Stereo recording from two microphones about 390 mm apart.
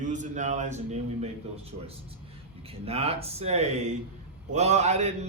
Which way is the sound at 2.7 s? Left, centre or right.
Centre.